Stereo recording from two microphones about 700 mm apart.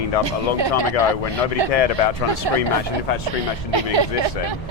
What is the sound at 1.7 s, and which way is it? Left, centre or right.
Speech, left.